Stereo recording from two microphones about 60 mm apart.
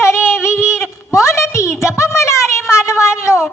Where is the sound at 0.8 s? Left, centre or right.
Left.